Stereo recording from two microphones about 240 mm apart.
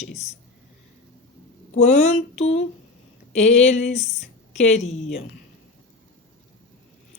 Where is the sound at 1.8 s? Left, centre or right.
Left.